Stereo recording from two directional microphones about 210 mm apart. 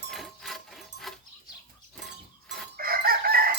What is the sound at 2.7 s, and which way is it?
Chicken, 45° right (ahead or behind).